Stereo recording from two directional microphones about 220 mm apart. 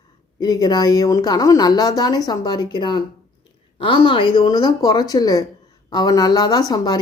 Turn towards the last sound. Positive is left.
turn(degrees=20)  # may be behind; listen again after turning